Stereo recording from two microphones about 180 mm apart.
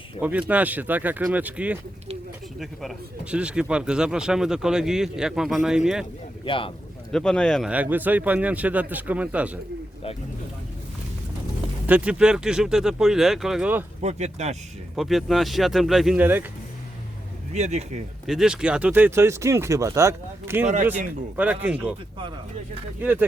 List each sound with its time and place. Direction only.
0.2 s speech: 10° right (ahead or behind)
6.4 s speech: 30° left (ahead or behind)
7.1 s speech: 5° left (ahead or behind)
7.7 s speech: 10° right (ahead or behind)
11.9 s speech: 5° right (ahead or behind)
14.0 s speech: 40° right (ahead or behind)
14.9 s speech: centre (ahead or behind)
17.5 s speech: 40° right (ahead or behind)
18.3 s speech: 5° right (ahead or behind)
23.0 s speech: 10° right (ahead or behind)